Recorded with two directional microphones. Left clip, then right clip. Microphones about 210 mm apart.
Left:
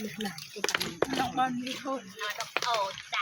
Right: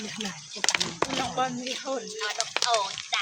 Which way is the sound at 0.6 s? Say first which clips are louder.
Right 3 dB; 45° right (ahead or behind).